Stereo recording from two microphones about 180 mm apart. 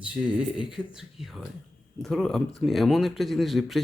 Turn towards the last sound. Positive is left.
turn(degrees=0)  # may be behind; listen again after turning